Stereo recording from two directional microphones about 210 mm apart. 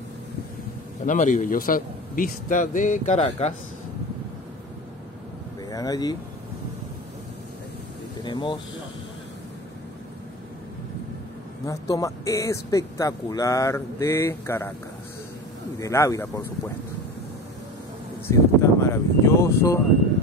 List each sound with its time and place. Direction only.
1.0 s a man's voice: 35° left (ahead or behind)
5.7 s speech: 15° left (ahead or behind)
8.2 s speech: 25° left (ahead or behind)
11.6 s speech: 15° left (ahead or behind)
15.8 s speech: 15° left (ahead or behind)
18.2 s speech: 10° left (ahead or behind)